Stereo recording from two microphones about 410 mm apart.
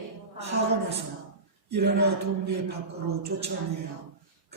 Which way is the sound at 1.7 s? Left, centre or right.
Right.